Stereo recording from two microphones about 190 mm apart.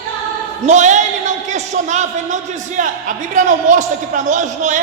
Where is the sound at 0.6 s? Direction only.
40° right (ahead or behind).